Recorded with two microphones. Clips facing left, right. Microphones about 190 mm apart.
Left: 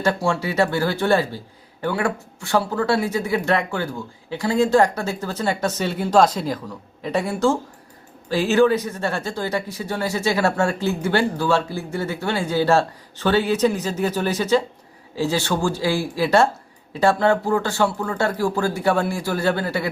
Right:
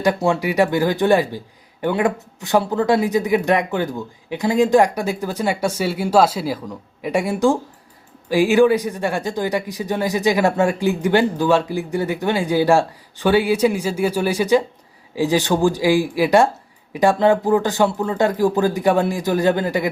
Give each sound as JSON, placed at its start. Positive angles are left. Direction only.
{"t": 0.0, "sound": "speech", "side_deg": -15}